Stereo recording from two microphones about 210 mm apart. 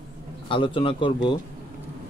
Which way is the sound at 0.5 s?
25° left (ahead or behind).